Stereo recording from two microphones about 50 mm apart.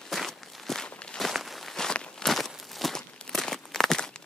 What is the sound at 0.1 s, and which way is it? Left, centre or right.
Walk, centre.